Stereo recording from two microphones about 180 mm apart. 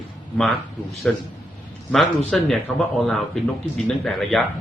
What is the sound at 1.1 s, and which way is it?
A man's voice, 5° left (ahead or behind).